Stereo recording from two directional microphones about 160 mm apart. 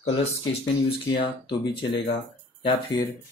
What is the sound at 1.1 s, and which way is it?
Speech, 30° left (ahead or behind).